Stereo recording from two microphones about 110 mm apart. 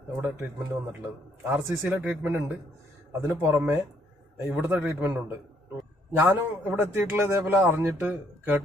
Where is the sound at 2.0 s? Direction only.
15° right (ahead or behind).